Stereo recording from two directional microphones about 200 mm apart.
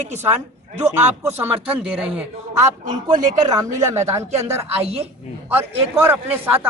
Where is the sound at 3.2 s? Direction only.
40° right (ahead or behind).